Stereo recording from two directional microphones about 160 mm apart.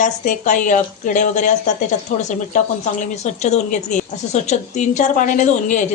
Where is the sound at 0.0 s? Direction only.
50° left (ahead or behind).